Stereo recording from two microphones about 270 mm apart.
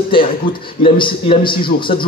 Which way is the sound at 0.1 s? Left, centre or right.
Centre.